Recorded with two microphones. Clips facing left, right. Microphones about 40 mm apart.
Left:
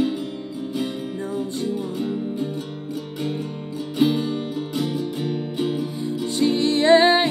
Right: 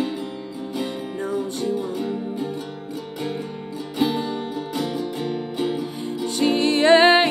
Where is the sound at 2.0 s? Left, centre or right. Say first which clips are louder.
Left 1 dB; centre.